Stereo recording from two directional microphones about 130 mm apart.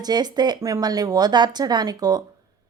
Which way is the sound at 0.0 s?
30° right (ahead or behind).